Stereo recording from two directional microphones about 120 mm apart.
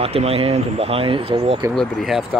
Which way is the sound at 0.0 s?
55° right (ahead or behind).